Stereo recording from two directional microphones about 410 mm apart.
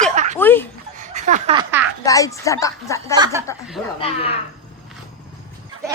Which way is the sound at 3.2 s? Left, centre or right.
Centre.